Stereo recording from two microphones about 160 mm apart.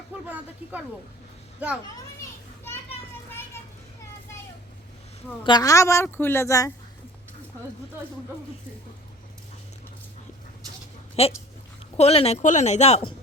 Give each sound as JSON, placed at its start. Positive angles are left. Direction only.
{"t": 5.4, "sound": "a woman's voice", "side_deg": 25}
{"t": 11.2, "sound": "speech", "side_deg": 40}